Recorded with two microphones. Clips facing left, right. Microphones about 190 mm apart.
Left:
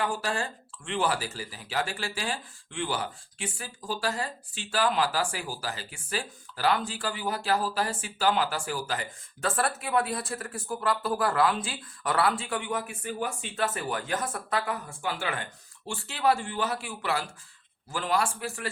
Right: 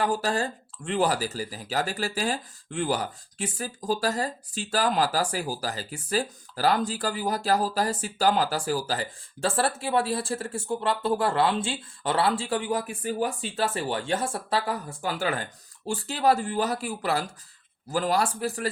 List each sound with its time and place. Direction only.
0.0 s speech: 40° right (ahead or behind)